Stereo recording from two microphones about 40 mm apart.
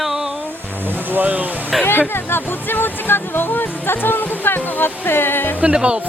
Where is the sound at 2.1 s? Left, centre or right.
Left.